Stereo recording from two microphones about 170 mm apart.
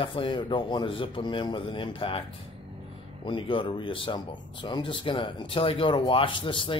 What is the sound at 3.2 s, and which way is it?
Speech, 30° left (ahead or behind).